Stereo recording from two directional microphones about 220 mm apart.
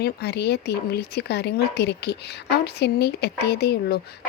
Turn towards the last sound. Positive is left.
turn(degrees=45)  # may be behind; listen again after turning